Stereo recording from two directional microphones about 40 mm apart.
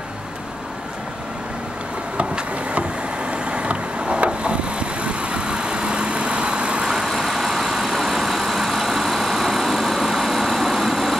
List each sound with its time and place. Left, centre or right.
2.1 s a sound: right
3.3 s vehicle: right
7.2 s vehicle: centre